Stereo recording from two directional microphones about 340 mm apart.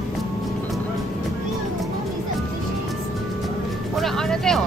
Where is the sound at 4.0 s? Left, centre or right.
Centre.